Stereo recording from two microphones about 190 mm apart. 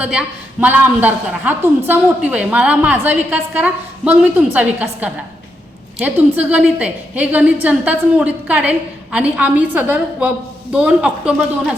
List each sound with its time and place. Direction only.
0.0 s a woman's voice: 5° right (ahead or behind)